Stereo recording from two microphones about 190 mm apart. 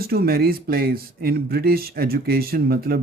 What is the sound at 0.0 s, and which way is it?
Speech, 55° right (ahead or behind).